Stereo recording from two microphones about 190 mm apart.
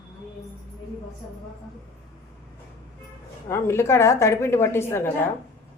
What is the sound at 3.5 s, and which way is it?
A woman's voice, 15° left (ahead or behind).